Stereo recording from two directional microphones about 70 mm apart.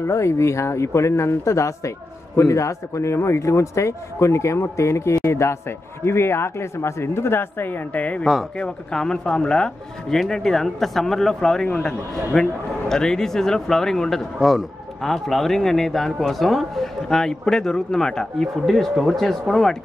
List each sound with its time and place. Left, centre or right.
0.0 s a man's voice: left; by 11.6 s centre
11.6 s a man's voice: centre